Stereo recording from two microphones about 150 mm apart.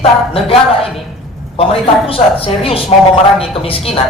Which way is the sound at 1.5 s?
40° left (ahead or behind).